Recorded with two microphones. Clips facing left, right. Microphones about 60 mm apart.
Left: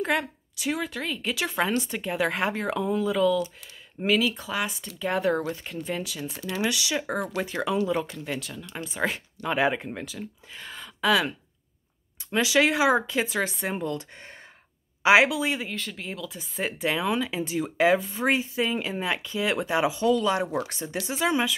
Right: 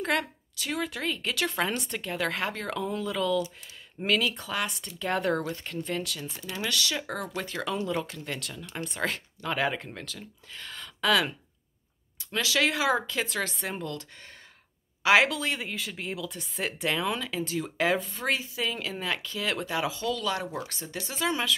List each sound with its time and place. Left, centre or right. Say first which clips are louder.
0.0 s speech: left 2 dB; centre
2.0 s speech: left 2 dB; centre
12.3 s speech: left 5 dB; centre
15.7 s speech: even; centre
18.5 s speech: left 5 dB; left